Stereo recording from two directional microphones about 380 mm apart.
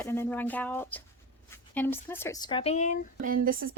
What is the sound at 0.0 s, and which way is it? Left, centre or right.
Speech, centre.